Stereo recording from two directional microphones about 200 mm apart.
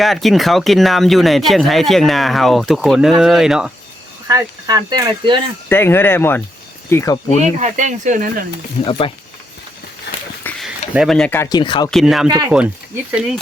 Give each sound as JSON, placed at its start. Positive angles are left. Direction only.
{"t": 0.0, "sound": "speech", "side_deg": 0}
{"t": 4.3, "sound": "speech", "side_deg": -20}
{"t": 5.6, "sound": "speech", "side_deg": 10}
{"t": 7.6, "sound": "speech", "side_deg": -40}
{"t": 8.8, "sound": "speech", "side_deg": 25}
{"t": 10.4, "sound": "speech", "side_deg": 0}
{"t": 11.9, "sound": "speech", "side_deg": 0}
{"t": 12.3, "sound": "speech", "side_deg": -15}
{"t": 12.5, "sound": "speech", "side_deg": -5}